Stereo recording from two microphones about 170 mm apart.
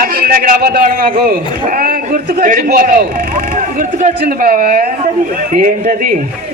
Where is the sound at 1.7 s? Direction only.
55° right (ahead or behind).